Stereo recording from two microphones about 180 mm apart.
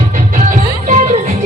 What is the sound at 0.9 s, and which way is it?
Music, 45° right (ahead or behind).